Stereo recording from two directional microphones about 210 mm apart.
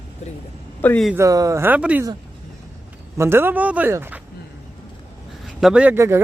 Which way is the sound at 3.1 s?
10° right (ahead or behind).